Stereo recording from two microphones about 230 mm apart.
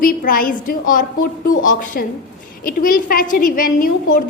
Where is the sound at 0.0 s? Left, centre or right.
Left.